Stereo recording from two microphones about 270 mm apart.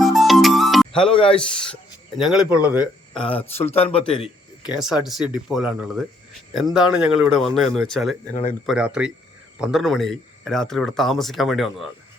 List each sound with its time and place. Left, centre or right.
0.0 s music: centre
1.0 s speech: centre
1.7 s speech: centre
3.5 s speech: left
5.0 s speech: centre